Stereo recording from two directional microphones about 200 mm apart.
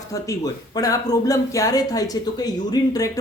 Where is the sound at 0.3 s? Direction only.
15° left (ahead or behind).